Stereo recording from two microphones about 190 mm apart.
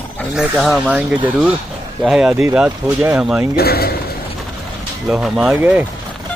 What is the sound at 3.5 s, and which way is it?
Speech, 55° left (ahead or behind).